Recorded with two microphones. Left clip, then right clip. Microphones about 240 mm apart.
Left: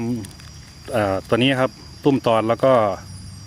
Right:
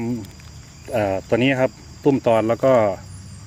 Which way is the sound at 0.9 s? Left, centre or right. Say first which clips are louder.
Even; centre.